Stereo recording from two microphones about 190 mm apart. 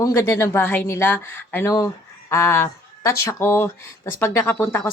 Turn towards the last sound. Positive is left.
turn(degrees=10)  # may be behind; listen again after turning